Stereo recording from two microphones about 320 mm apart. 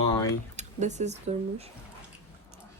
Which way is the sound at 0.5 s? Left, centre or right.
Right.